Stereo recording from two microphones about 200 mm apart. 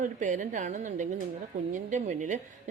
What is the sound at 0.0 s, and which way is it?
A woman's voice, 40° right (ahead or behind).